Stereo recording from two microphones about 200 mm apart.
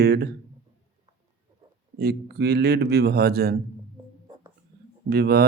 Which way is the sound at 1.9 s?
55° right (ahead or behind).